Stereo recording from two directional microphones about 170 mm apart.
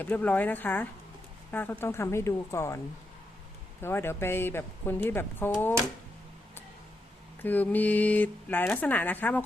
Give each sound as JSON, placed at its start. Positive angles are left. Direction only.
{"t": 0.0, "sound": "speech", "side_deg": 10}
{"t": 7.4, "sound": "speech", "side_deg": 10}